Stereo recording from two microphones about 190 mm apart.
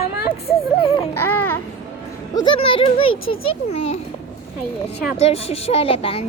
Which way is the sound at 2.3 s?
25° left (ahead or behind).